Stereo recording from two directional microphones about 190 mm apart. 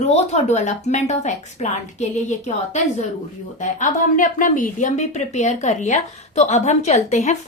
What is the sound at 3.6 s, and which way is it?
A woman's voice, 40° left (ahead or behind).